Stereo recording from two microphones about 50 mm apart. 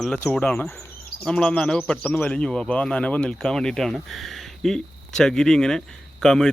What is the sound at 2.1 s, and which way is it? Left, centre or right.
Speech, left.